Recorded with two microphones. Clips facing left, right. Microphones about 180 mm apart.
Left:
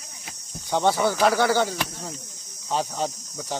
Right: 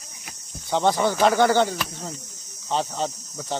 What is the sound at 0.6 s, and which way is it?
Speech, 15° left (ahead or behind).